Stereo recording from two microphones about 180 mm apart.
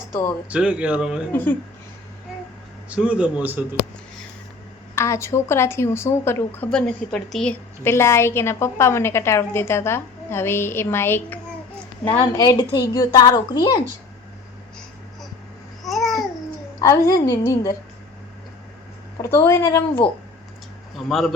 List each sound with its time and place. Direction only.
0.4 s speech: 5° right (ahead or behind)
1.3 s a woman's voice: 10° left (ahead or behind)
2.9 s speech: 5° right (ahead or behind)
4.9 s a woman's voice: 15° left (ahead or behind)
12.2 s speech: 25° left (ahead or behind)
15.9 s babbling: centre (ahead or behind)
16.8 s speech: 20° left (ahead or behind)
19.1 s a woman's voice: 15° left (ahead or behind)
21.1 s speech: centre (ahead or behind)